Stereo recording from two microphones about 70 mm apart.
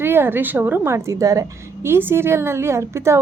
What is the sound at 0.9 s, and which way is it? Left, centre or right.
Speech, right.